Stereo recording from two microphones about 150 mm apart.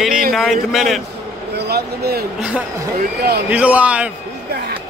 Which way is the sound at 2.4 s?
10° right (ahead or behind).